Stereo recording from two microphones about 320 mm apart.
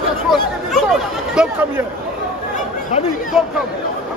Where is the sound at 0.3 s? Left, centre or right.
Centre.